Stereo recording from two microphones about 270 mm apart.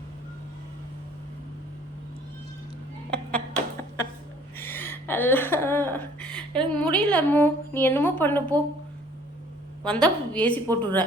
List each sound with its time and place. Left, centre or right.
3.1 s a sound: centre
6.6 s a woman's voice: centre
9.8 s a woman's voice: centre